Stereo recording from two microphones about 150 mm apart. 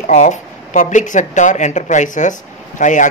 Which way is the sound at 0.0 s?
50° left (ahead or behind).